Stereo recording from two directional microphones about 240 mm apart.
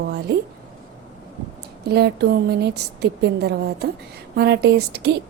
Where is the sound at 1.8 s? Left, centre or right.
Right.